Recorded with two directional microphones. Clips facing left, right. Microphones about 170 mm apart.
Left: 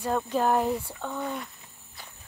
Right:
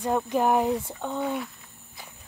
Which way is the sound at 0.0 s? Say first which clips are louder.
Right 2 dB; 15° right (ahead or behind).